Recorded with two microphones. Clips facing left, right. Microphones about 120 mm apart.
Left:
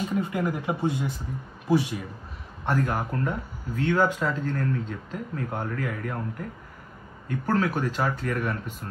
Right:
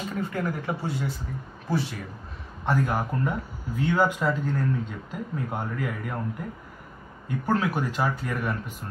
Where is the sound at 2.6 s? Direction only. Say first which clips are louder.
Right 1 dB; centre (ahead or behind).